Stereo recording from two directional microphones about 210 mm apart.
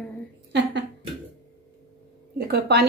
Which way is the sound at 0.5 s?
55° right (ahead or behind).